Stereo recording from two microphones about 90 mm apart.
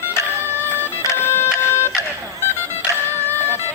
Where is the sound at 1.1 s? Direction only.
25° left (ahead or behind).